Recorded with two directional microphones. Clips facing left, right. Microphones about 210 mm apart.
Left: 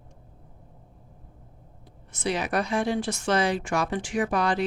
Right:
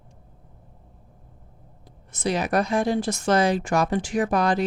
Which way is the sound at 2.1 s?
40° right (ahead or behind).